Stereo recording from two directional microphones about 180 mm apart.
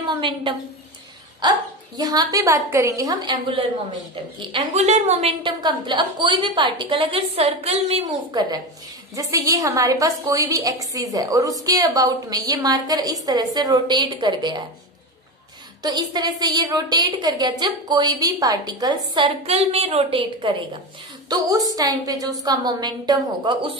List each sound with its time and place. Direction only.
0.0 s a woman's voice: 25° right (ahead or behind)
8.3 s a woman's voice: 25° right (ahead or behind)
15.8 s a woman's voice: 25° right (ahead or behind)